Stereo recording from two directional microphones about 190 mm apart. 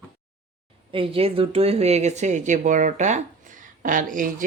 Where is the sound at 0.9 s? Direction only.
30° right (ahead or behind).